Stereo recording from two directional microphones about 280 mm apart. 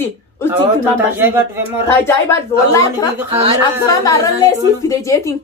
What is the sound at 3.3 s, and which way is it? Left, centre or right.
Speech, right.